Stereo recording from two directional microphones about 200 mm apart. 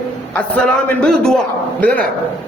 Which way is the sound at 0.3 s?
5° left (ahead or behind).